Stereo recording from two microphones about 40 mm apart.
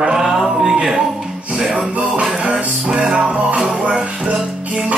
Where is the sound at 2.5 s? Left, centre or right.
Centre.